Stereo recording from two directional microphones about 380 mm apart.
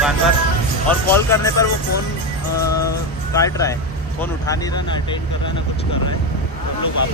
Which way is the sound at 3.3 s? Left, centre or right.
Centre.